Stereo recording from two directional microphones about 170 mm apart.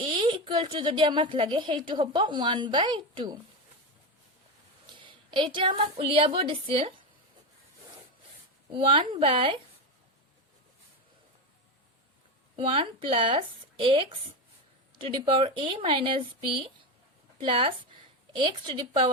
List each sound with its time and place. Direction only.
0.0 s a woman's voice: 30° right (ahead or behind)
4.9 s a woman's voice: 30° right (ahead or behind)
8.7 s speech: 30° right (ahead or behind)
12.5 s a woman's voice: 30° right (ahead or behind)